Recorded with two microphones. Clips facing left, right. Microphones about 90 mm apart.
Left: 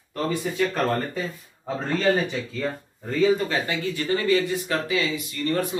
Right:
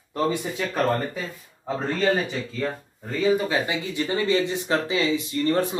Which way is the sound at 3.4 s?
15° right (ahead or behind).